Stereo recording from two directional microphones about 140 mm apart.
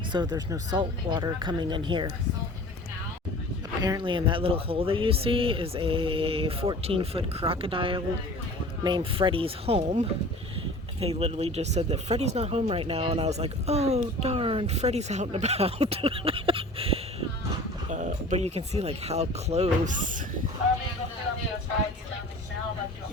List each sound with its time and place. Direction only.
0.1 s speech: 30° right (ahead or behind)
3.8 s speech: 30° right (ahead or behind)
17.8 s speech: 60° right (ahead or behind)